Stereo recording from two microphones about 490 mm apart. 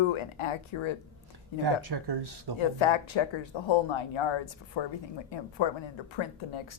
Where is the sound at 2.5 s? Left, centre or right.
Left.